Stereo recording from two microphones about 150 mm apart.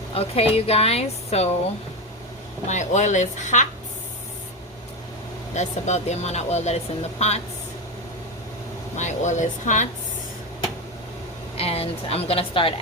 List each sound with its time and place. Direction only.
0.1 s a woman's voice: 40° left (ahead or behind)
2.6 s speech: 50° left (ahead or behind)
5.5 s speech: 50° left (ahead or behind)
9.0 s speech: 55° left (ahead or behind)
11.5 s a woman's voice: 40° left (ahead or behind)